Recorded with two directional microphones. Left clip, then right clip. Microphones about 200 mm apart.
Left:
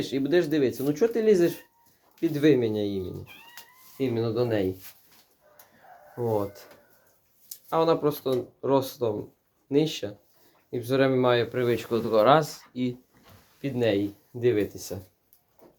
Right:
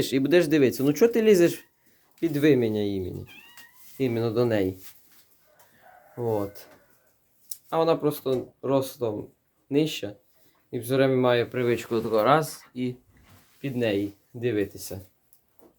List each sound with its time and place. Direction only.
0.0 s speech: 40° right (ahead or behind)
2.2 s speech: 25° right (ahead or behind)
6.1 s speech: 15° right (ahead or behind)
13.6 s speech: 5° right (ahead or behind)